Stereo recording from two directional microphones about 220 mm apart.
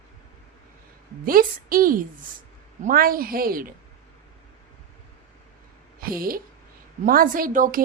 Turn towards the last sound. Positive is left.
turn(degrees=-40)  # may be behind; listen again after turning